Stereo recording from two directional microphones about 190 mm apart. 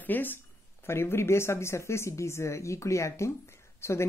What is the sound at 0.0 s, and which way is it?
Speech, 10° left (ahead or behind).